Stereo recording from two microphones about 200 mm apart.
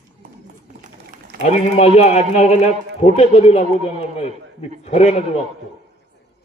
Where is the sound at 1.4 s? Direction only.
35° left (ahead or behind).